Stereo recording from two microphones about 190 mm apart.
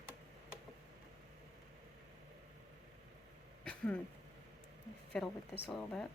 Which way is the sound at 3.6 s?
5° left (ahead or behind).